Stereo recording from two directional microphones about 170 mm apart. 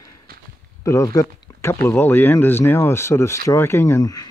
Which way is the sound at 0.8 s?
20° left (ahead or behind).